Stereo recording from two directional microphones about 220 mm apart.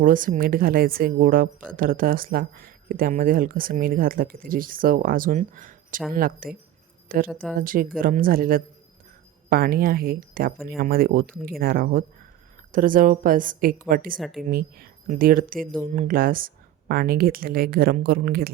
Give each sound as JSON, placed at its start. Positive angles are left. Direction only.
{"t": 0.0, "sound": "speech", "side_deg": -40}